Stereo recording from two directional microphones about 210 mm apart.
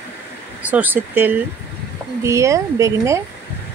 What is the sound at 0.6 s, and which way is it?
A woman's voice, 10° right (ahead or behind).